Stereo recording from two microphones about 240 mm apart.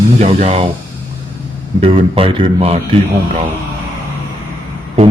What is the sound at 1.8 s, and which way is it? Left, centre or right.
Speech, right.